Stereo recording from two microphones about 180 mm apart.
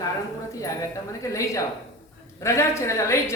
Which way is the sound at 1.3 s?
15° left (ahead or behind).